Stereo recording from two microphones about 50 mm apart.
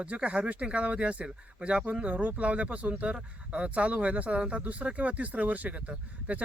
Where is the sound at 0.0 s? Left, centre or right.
Right.